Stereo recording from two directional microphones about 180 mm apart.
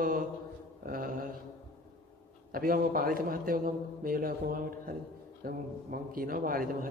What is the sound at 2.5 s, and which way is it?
A man's voice, 55° right (ahead or behind).